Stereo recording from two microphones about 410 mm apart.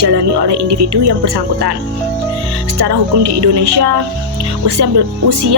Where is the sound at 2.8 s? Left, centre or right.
Right.